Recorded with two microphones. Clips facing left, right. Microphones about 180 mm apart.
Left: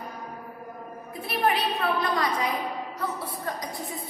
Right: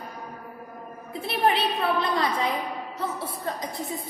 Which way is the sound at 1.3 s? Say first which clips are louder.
Right 2 dB; 25° right (ahead or behind).